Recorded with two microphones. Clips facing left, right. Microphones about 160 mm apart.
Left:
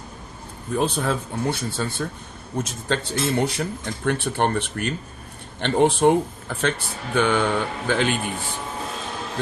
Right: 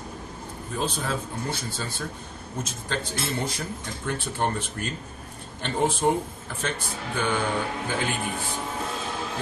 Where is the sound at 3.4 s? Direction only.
70° left (ahead or behind).